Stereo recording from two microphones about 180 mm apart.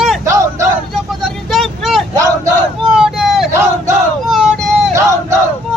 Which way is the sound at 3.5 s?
15° right (ahead or behind).